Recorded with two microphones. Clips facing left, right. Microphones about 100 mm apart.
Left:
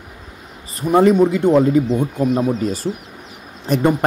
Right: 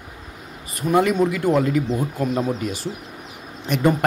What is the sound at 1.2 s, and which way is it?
Speech, 25° left (ahead or behind).